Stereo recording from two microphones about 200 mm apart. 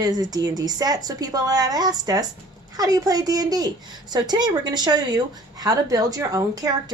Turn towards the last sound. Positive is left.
turn(degrees=-20)  # may be behind; listen again after turning